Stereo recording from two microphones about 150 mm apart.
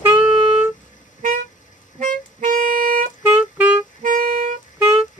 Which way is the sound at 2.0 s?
60° right (ahead or behind).